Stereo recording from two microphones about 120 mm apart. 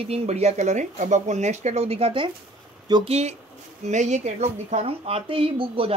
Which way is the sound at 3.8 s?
80° right.